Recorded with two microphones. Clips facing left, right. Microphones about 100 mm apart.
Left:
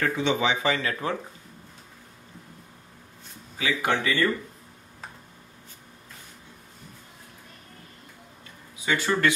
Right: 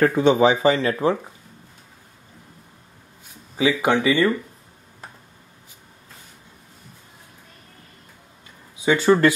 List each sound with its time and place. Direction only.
0.0 s speech: 45° right (ahead or behind); by 1.1 s 30° right (ahead or behind)
3.5 s speech: 15° right (ahead or behind)
8.8 s speech: 25° right (ahead or behind)